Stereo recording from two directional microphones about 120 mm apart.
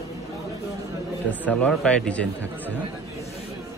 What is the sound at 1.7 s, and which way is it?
Speech, 10° left (ahead or behind).